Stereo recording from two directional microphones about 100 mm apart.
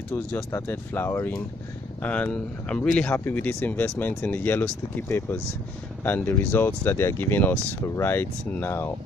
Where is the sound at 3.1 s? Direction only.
20° left (ahead or behind).